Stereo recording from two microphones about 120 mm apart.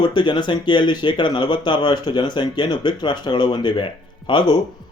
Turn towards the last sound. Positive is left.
turn(degrees=40)  # may be behind; listen again after turning